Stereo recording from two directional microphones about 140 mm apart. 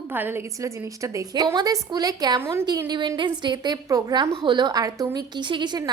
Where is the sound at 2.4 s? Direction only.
20° right (ahead or behind).